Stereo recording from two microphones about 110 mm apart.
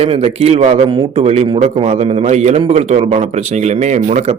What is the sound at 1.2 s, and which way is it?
A man's voice, 70° right (ahead or behind).